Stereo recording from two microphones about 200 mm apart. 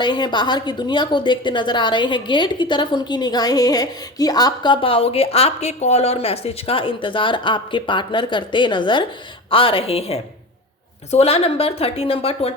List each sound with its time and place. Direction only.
0.0 s a woman's voice: 25° left (ahead or behind)